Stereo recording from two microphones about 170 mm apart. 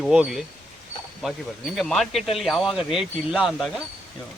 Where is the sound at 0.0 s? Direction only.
5° right (ahead or behind).